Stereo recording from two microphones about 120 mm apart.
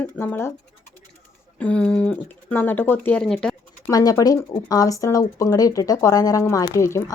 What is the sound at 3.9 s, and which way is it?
A woman's voice, 30° left (ahead or behind).